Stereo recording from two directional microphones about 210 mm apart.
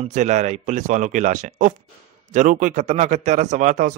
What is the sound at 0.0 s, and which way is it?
Speech, 35° right (ahead or behind).